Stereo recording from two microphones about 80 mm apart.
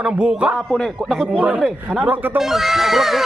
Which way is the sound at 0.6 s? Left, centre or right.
Centre.